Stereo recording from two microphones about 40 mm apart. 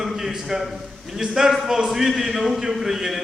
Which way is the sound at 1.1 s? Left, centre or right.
Centre.